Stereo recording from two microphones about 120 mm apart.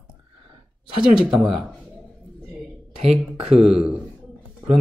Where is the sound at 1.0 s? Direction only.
5° right (ahead or behind).